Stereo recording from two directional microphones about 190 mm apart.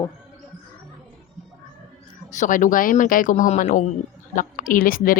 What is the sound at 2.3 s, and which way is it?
Speech, 40° left (ahead or behind).